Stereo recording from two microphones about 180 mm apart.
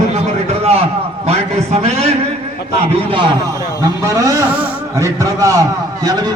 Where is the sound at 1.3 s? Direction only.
35° right (ahead or behind).